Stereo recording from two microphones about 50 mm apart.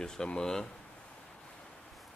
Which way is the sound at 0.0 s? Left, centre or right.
Centre.